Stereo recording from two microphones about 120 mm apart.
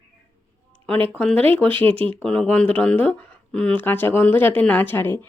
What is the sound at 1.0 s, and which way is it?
Speech, 10° left (ahead or behind).